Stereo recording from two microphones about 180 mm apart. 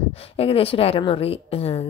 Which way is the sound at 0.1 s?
35° left (ahead or behind).